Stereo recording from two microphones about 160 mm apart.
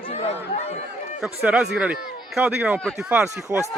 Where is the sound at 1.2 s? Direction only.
5° right (ahead or behind).